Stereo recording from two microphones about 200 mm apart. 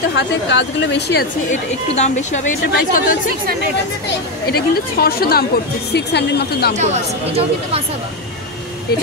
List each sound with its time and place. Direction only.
0.1 s a woman's voice: 60° left (ahead or behind)
1.5 s a woman's voice: 35° left (ahead or behind)
4.5 s a woman's voice: 50° left (ahead or behind)
6.8 s speech: 30° right (ahead or behind)